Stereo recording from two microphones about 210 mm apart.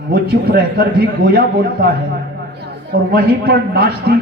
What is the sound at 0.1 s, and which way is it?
A man's voice, 50° right (ahead or behind).